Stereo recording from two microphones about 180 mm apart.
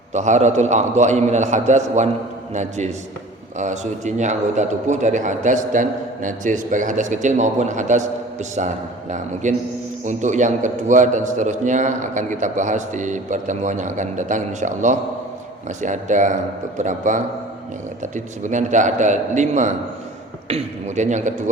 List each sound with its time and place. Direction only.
0.1 s a man's voice: 40° right (ahead or behind)